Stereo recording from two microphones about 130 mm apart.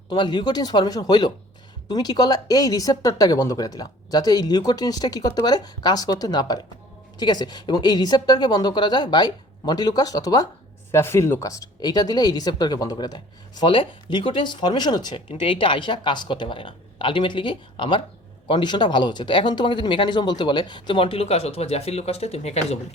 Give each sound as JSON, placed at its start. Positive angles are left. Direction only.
{"t": 0.1, "sound": "speech", "side_deg": 35}